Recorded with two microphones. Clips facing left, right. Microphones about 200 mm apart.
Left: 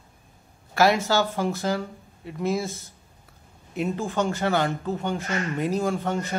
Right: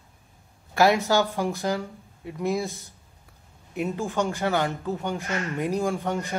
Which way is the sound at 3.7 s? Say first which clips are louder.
Left 1 dB; 10° right (ahead or behind).